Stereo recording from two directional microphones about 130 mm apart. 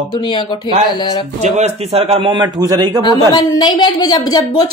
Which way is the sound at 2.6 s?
30° right (ahead or behind).